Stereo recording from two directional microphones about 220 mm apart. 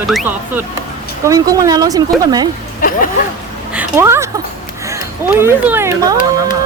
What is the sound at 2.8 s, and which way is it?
Speech, 40° left (ahead or behind).